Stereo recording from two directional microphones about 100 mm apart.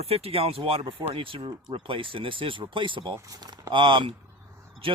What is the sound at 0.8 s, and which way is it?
Speech, 55° right (ahead or behind).